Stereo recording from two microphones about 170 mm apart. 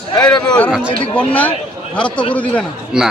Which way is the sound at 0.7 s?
5° right (ahead or behind).